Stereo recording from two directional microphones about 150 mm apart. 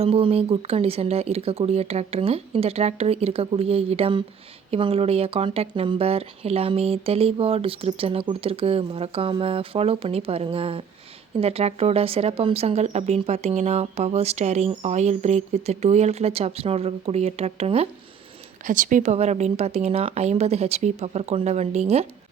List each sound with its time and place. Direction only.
0.0 s speech: 40° right (ahead or behind)
18.6 s speech: 60° right (ahead or behind)